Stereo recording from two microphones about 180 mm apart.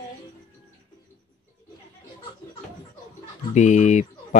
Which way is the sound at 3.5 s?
40° left (ahead or behind).